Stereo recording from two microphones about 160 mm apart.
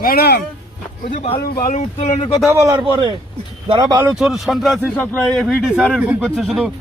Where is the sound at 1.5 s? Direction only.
55° left (ahead or behind).